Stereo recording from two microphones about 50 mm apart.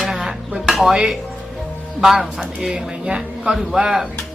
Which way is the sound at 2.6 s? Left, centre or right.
Centre.